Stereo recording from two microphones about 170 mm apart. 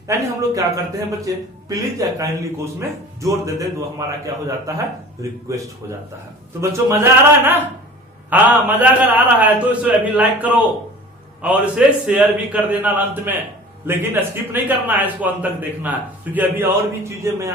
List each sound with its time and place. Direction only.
0.1 s a man's voice: 20° right (ahead or behind)
5.2 s a man's voice: 20° right (ahead or behind)